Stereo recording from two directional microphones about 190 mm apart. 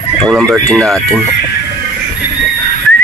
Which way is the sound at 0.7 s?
5° left (ahead or behind).